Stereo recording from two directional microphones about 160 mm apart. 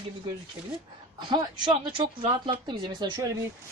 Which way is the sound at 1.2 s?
30° right (ahead or behind).